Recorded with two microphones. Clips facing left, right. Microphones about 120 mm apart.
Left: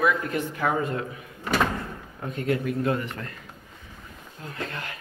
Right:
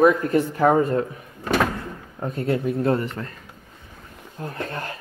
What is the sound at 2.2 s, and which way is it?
Speech, 35° right (ahead or behind).